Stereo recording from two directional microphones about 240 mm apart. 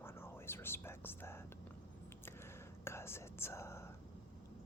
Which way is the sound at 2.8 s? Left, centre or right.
Centre.